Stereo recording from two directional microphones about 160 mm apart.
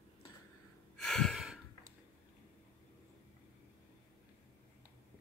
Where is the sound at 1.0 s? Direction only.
5° left (ahead or behind).